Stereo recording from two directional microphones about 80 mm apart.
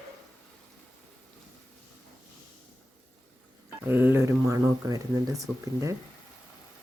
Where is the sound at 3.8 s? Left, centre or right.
Right.